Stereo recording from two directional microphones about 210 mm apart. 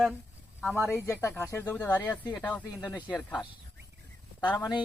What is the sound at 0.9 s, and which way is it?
Speech, 10° left (ahead or behind).